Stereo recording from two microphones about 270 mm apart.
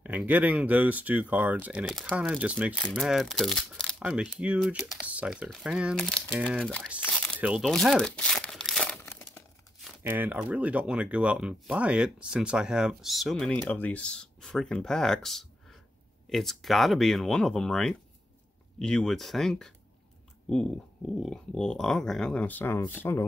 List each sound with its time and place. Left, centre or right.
0.0 s speech: centre